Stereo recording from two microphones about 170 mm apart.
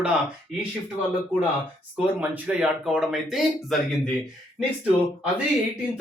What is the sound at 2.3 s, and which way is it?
Speech, 5° right (ahead or behind).